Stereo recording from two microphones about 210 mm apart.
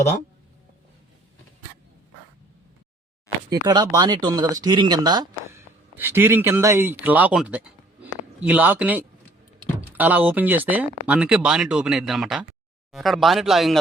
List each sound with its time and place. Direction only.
3.5 s speech: 20° right (ahead or behind); by 13.7 s centre (ahead or behind)